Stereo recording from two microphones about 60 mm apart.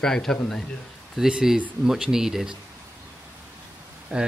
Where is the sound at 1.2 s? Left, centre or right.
Centre.